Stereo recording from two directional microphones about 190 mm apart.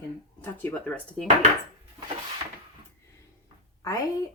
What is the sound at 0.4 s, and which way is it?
Speech, 10° left (ahead or behind).